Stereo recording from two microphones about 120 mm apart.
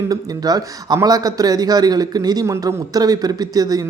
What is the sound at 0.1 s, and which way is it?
A man's voice, 35° right (ahead or behind).